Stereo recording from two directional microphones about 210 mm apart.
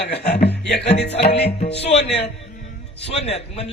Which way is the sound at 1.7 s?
30° left (ahead or behind).